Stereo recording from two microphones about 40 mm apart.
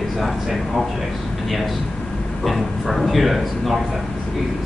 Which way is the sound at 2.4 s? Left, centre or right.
Centre.